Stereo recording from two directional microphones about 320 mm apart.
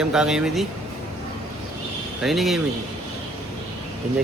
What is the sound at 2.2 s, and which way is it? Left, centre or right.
Speech, centre.